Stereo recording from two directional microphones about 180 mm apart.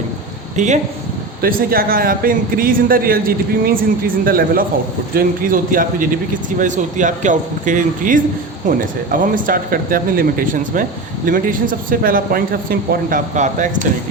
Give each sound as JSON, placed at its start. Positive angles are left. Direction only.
{"t": 0.5, "sound": "speech", "side_deg": -40}
{"t": 1.4, "sound": "a man's voice", "side_deg": -55}